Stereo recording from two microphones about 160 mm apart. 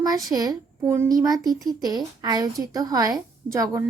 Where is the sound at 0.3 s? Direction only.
25° right (ahead or behind).